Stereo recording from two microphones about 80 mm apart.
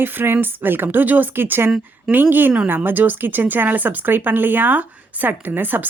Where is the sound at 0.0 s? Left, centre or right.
Right.